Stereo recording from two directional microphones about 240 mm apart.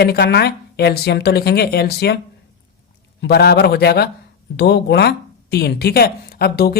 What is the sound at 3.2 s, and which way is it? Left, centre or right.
Speech, left.